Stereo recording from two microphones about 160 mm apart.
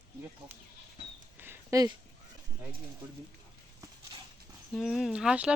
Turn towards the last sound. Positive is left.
turn(degrees=-5)  # may be behind; listen again after turning